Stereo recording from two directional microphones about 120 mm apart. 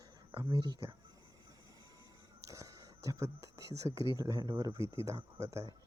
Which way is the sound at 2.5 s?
30° right (ahead or behind).